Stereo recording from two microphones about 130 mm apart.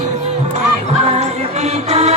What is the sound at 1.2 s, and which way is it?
Music, 55° right (ahead or behind).